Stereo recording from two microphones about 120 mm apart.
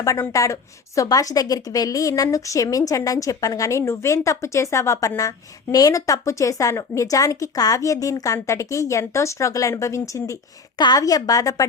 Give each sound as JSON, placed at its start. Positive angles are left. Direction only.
{"t": 0.0, "sound": "a woman's voice", "side_deg": 25}
{"t": 10.8, "sound": "a woman's voice", "side_deg": 35}